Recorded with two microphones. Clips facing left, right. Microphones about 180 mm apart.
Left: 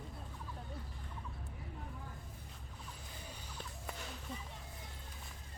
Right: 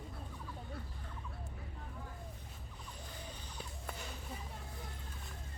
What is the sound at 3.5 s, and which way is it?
Clip-clop, centre (ahead or behind).